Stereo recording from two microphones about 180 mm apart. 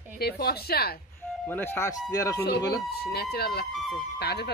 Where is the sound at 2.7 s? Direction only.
60° left (ahead or behind).